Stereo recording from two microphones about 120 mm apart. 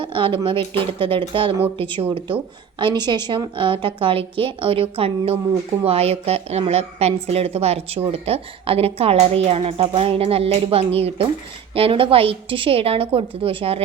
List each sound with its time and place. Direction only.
0.0 s a woman's voice: 45° right (ahead or behind)
2.7 s a woman's voice: 35° right (ahead or behind)